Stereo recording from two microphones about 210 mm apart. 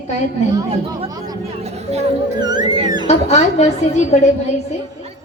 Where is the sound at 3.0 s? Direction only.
30° left (ahead or behind).